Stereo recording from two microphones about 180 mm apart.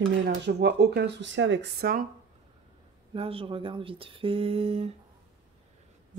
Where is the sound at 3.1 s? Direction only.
30° right (ahead or behind).